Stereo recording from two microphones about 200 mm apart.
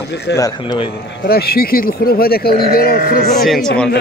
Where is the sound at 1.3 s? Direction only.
50° left (ahead or behind).